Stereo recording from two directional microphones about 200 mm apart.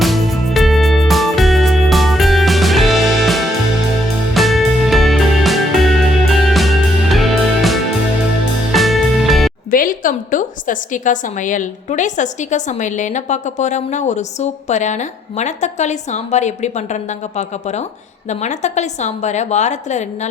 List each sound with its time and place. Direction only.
0.0 s music: centre (ahead or behind)
9.7 s a woman's voice: 45° left (ahead or behind)